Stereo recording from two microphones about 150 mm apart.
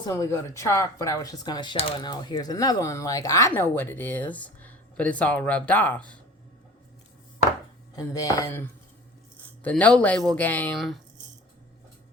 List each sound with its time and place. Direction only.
0.1 s speech: 20° left (ahead or behind)
7.9 s speech: 25° left (ahead or behind)
9.6 s speech: 10° left (ahead or behind)